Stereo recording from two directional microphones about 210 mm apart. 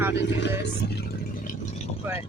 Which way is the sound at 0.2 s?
55° left (ahead or behind).